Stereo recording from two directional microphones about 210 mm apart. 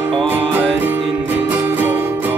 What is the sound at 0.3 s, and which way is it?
Music, 10° right (ahead or behind).